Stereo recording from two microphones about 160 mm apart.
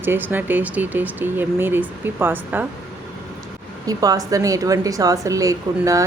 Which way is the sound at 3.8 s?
20° right (ahead or behind).